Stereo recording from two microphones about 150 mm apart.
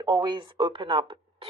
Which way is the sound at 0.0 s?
30° right (ahead or behind).